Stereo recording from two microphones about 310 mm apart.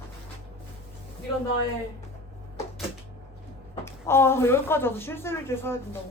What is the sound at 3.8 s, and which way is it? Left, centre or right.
Speech, centre.